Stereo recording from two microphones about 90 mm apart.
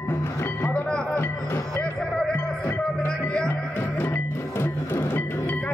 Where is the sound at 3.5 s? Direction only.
25° left (ahead or behind).